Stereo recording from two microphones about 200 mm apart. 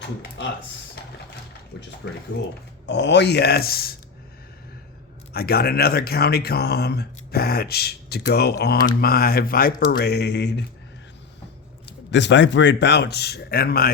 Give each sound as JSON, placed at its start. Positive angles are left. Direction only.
{"t": 0.2, "sound": "speech", "side_deg": 60}
{"t": 1.7, "sound": "speech", "side_deg": 60}
{"t": 5.3, "sound": "speech", "side_deg": 50}
{"t": 11.9, "sound": "speech", "side_deg": 60}